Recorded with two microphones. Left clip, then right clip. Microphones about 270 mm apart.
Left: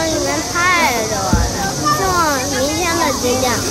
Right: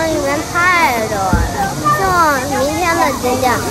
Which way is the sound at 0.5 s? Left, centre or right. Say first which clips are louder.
Right 2 dB; centre.